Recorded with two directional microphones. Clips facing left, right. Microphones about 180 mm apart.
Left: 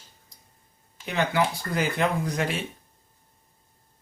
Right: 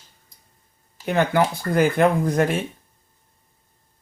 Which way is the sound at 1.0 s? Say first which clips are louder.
Right 5 dB; 50° right (ahead or behind).